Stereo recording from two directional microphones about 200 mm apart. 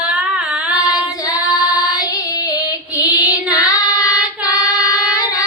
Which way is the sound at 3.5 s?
20° left (ahead or behind).